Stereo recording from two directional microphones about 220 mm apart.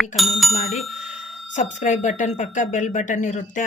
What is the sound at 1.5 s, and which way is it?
Speech, 35° left (ahead or behind).